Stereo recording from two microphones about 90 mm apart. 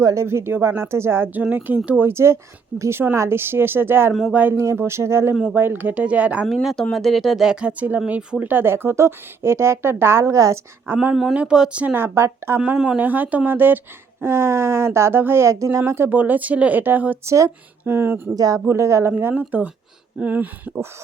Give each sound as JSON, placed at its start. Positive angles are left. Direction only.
{"t": 0.0, "sound": "speech", "side_deg": -35}
{"t": 2.0, "sound": "speech", "side_deg": -30}
{"t": 4.5, "sound": "speech", "side_deg": -30}
{"t": 5.3, "sound": "speech", "side_deg": -10}
{"t": 5.5, "sound": "speech", "side_deg": -20}
{"t": 6.5, "sound": "speech", "side_deg": 0}
{"t": 10.9, "sound": "speech", "side_deg": -15}
{"t": 12.5, "sound": "speech", "side_deg": -15}
{"t": 16.0, "sound": "speech", "side_deg": -20}
{"t": 17.2, "sound": "speech", "side_deg": -35}
{"t": 17.8, "sound": "speech", "side_deg": -25}
{"t": 18.3, "sound": "a woman's voice", "side_deg": -45}
{"t": 18.7, "sound": "speech", "side_deg": -30}
{"t": 19.1, "sound": "speech", "side_deg": -20}